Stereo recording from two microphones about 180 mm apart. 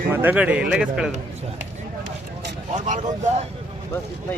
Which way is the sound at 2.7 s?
40° right (ahead or behind).